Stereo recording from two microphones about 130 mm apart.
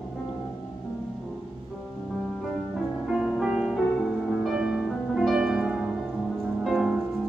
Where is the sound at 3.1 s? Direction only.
5° right (ahead or behind).